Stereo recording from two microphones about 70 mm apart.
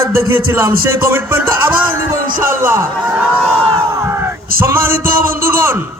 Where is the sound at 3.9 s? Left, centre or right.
Right.